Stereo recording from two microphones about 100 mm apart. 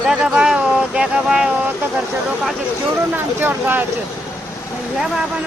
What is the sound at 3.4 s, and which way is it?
Speech, 20° right (ahead or behind).